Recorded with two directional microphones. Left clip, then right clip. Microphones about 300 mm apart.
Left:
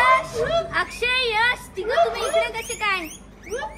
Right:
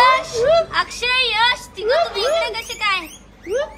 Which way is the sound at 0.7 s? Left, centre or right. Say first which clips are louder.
Right 3 dB; centre.